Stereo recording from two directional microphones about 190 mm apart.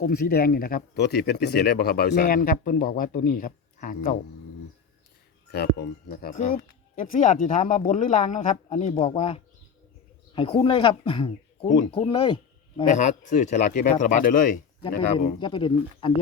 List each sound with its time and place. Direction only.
0.0 s speech: 50° left (ahead or behind)
5.5 s speech: 60° left (ahead or behind); by 12.8 s 25° left (ahead or behind)
12.9 s speech: 40° left (ahead or behind)
15.4 s speech: 25° left (ahead or behind)